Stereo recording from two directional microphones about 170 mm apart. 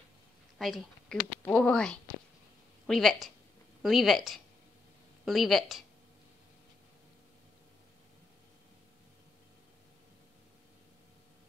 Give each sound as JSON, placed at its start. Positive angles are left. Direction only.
{"t": 0.6, "sound": "a woman's voice", "side_deg": 0}